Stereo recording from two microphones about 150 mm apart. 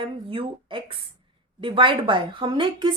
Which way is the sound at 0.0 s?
35° right (ahead or behind).